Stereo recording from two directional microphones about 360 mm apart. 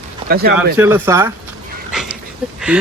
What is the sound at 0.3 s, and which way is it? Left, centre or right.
Speech, right.